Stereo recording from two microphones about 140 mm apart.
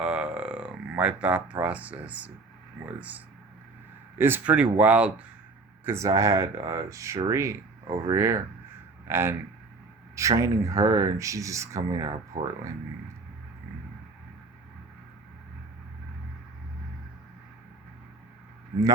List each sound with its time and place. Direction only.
0.0 s speech: 5° right (ahead or behind)
5.8 s speech: 20° right (ahead or behind)